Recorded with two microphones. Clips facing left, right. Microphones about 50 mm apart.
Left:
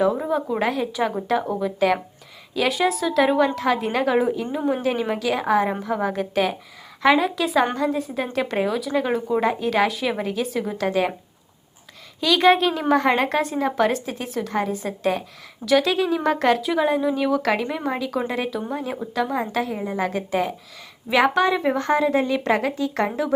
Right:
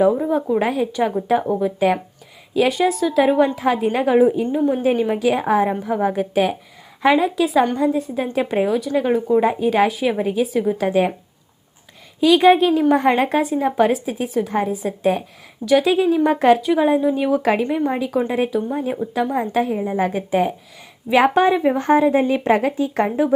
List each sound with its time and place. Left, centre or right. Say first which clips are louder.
0.3 s a woman's voice: right 4 dB; centre
5.2 s a woman's voice: right 1 dB; centre
12.2 s a woman's voice: right 4 dB; centre
18.3 s a woman's voice: right 5 dB; centre
20.0 s speech: right 4 dB; centre